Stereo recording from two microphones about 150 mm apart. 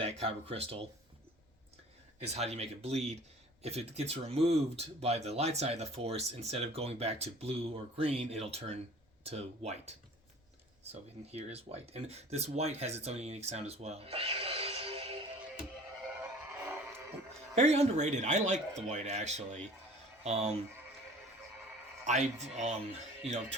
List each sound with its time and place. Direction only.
0.0 s speech: 40° right (ahead or behind)
2.1 s speech: 45° right (ahead or behind)
11.3 s speech: 45° right (ahead or behind)
16.6 s a sound: 15° right (ahead or behind)
17.5 s speech: 45° right (ahead or behind)
22.0 s speech: 50° right (ahead or behind)